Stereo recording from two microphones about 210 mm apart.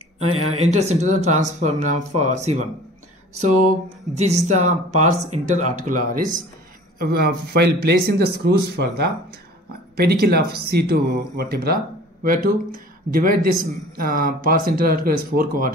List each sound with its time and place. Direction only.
0.3 s speech: 30° right (ahead or behind)
4.1 s speech: 35° right (ahead or behind)